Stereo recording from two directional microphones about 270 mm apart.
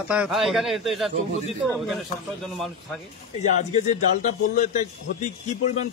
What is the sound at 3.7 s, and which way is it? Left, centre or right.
Speech, left.